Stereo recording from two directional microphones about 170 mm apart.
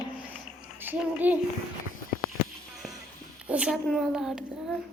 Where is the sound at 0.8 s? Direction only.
10° right (ahead or behind).